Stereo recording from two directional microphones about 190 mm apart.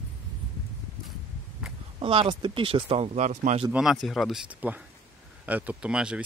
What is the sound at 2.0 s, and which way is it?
Speech, 30° right (ahead or behind).